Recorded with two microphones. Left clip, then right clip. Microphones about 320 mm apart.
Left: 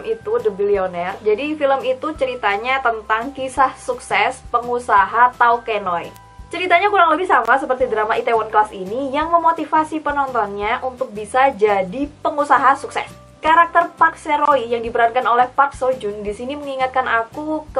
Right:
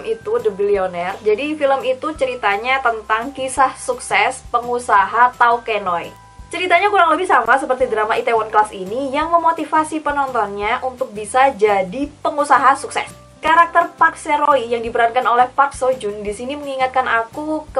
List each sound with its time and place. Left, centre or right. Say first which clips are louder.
0.0 s a woman's voice: right 1 dB; centre
4.6 s speech: even; centre
4.9 s a woman's voice: even; centre
8.7 s a woman's voice: right 1 dB; left
9.6 s a woman's voice: even; centre